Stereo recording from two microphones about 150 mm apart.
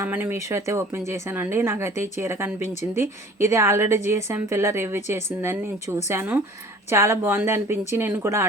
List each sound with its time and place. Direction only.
0.0 s a woman's voice: 15° right (ahead or behind)